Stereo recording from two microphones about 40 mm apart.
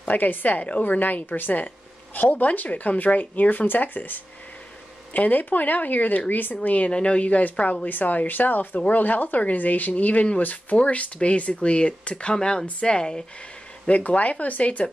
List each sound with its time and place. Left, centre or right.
0.0 s speech: left
13.8 s speech: left